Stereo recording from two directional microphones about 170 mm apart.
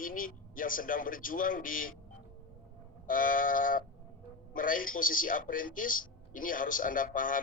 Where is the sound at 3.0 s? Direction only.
55° left (ahead or behind).